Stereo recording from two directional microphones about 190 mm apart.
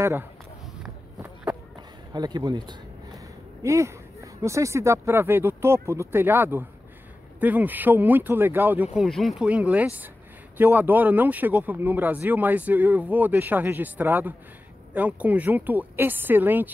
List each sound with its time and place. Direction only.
0.0 s speech: 15° right (ahead or behind)
1.2 s run: 10° right (ahead or behind)
2.1 s speech: 20° right (ahead or behind)